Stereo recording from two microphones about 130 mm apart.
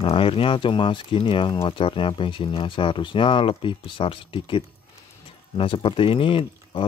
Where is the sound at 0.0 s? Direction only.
45° left (ahead or behind).